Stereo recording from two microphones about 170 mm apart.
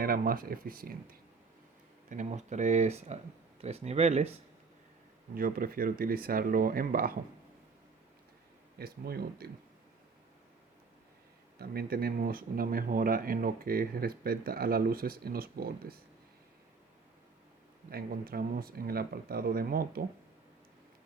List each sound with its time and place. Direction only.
0.0 s speech: 60° right (ahead or behind)
2.0 s speech: 45° right (ahead or behind)
5.3 s speech: 60° right (ahead or behind)
8.8 s speech: 65° right (ahead or behind)
11.6 s speech: 65° right (ahead or behind)
17.9 s speech: 60° right (ahead or behind)